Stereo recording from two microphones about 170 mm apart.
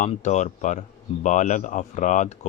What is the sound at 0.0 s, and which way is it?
Speech, 45° left (ahead or behind).